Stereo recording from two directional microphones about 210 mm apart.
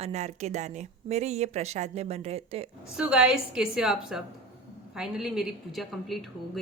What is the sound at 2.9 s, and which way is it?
A woman's voice, 5° right (ahead or behind).